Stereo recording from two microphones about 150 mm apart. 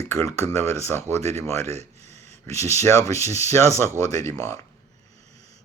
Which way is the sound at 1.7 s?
45° right (ahead or behind).